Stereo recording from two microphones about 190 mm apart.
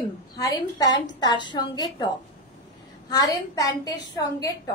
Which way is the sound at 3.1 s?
20° left (ahead or behind).